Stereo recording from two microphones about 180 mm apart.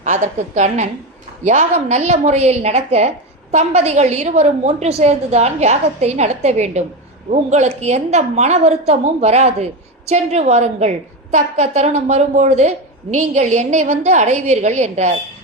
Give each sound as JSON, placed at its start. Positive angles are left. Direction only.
{"t": 0.0, "sound": "a woman's voice", "side_deg": -40}